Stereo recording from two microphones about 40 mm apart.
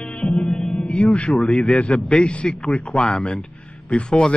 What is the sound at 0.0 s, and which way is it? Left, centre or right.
A man's voice, left.